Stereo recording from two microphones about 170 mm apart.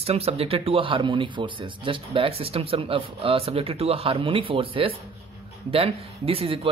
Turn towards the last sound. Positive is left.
turn(degrees=-35)  # may be behind; listen again after turning